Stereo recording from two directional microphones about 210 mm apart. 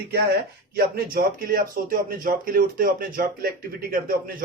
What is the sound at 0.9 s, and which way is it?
Speech, 45° right (ahead or behind).